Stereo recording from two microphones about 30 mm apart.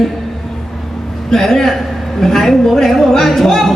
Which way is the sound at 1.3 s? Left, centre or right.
Centre.